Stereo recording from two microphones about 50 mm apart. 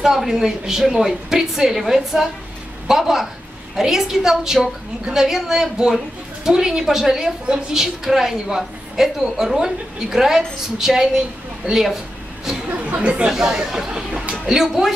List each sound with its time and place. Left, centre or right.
0.0 s a woman's voice: centre
12.7 s speech: right
13.3 s a woman's voice: centre